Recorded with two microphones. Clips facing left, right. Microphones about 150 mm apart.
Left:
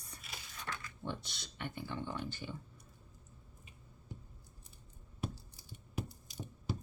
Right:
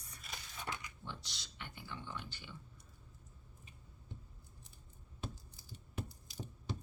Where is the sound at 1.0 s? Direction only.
55° left (ahead or behind).